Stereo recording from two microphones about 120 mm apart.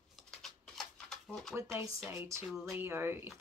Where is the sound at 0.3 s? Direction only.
5° left (ahead or behind).